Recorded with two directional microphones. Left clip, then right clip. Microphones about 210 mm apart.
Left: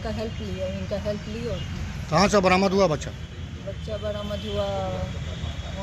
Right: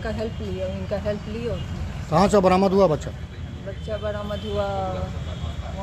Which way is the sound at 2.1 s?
20° right (ahead or behind).